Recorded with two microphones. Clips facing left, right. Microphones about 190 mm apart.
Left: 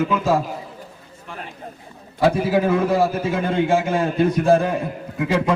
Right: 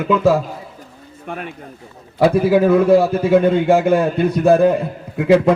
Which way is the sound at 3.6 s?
60° right (ahead or behind).